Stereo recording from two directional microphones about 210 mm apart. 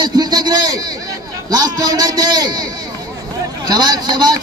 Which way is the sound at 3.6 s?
20° right (ahead or behind).